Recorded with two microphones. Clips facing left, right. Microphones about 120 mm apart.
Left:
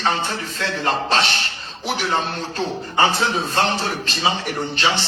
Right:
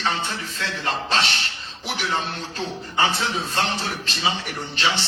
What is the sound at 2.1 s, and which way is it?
A man's voice, 55° left (ahead or behind).